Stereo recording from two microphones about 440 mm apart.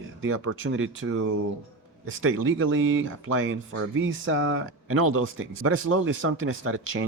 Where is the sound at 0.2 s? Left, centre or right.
Right.